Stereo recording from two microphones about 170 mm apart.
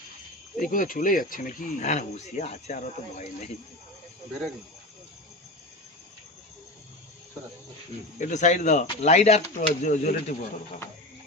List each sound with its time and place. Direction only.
0.6 s speech: 55° left (ahead or behind)
8.2 s speech: 45° left (ahead or behind)